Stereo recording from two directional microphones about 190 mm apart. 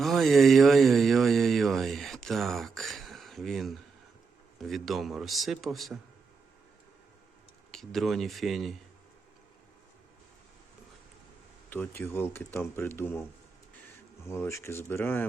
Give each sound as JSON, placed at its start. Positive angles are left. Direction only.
{"t": 0.0, "sound": "a sound", "side_deg": 0}
{"t": 4.6, "sound": "a man's voice", "side_deg": 0}
{"t": 7.7, "sound": "a man's voice", "side_deg": 0}
{"t": 11.7, "sound": "speech", "side_deg": 10}
{"t": 14.3, "sound": "speech", "side_deg": 15}